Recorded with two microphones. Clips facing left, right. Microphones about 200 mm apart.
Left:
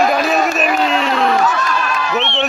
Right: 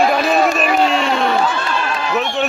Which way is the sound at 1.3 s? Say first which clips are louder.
Left 2 dB; 30° right (ahead or behind).